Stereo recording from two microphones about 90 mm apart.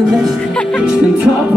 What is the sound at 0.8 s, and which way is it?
Speech, 10° right (ahead or behind).